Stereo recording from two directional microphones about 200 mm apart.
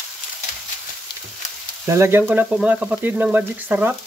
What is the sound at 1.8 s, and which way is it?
Speech, 15° right (ahead or behind).